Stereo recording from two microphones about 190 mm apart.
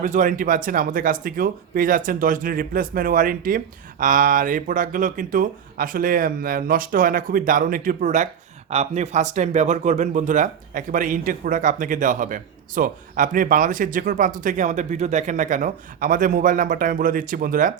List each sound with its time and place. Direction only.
0.0 s speech: 40° right (ahead or behind)